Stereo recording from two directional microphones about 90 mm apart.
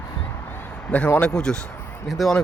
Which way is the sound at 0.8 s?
15° left (ahead or behind).